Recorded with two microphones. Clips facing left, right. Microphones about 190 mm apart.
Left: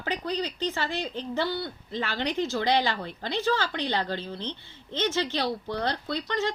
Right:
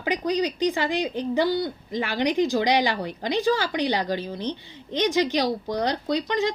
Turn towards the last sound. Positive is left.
turn(degrees=-15)  # may be behind; listen again after turning